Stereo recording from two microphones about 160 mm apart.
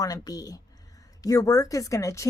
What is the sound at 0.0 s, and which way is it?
A woman's voice, 25° left (ahead or behind).